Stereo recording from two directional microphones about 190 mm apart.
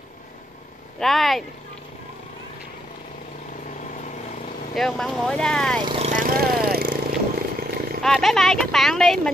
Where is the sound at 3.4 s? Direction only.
40° left (ahead or behind).